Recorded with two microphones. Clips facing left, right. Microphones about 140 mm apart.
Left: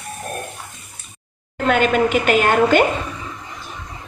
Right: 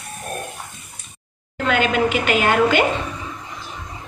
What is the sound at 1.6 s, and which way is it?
A woman's voice, 45° left (ahead or behind).